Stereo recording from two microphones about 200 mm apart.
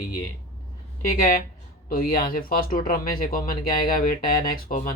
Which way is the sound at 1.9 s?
45° left (ahead or behind).